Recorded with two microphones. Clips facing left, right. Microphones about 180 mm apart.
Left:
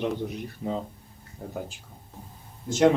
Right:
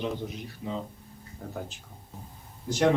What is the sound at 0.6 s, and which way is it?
Speech, 45° left (ahead or behind).